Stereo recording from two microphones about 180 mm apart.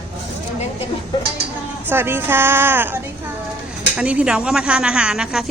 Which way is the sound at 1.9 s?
10° right (ahead or behind).